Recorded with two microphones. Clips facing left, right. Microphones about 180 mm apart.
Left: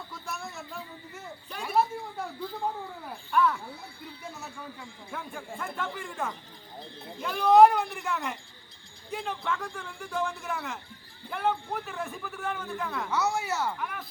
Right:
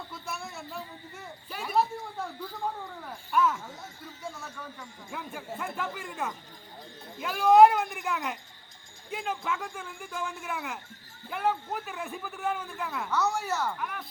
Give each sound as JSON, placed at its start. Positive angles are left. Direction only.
{"t": 0.1, "sound": "a sound", "side_deg": -5}
{"t": 3.3, "sound": "a man's voice", "side_deg": -5}
{"t": 4.0, "sound": "speech", "side_deg": 20}
{"t": 5.1, "sound": "a man's voice", "side_deg": -5}
{"t": 13.1, "sound": "a man's voice", "side_deg": 5}